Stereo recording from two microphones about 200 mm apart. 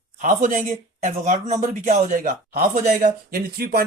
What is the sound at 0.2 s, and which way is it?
Speech, 40° right (ahead or behind).